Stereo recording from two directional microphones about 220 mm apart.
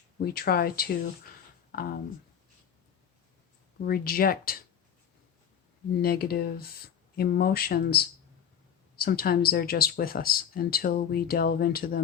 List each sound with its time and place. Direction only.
0.2 s speech: 45° left (ahead or behind)
3.8 s speech: 45° left (ahead or behind)
6.0 s speech: 45° left (ahead or behind)